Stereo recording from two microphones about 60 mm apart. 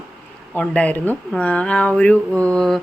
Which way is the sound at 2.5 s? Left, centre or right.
Centre.